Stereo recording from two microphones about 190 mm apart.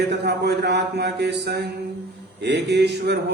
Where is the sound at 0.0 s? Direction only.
60° right (ahead or behind).